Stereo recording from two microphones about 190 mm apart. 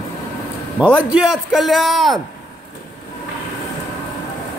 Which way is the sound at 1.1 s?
Centre (ahead or behind).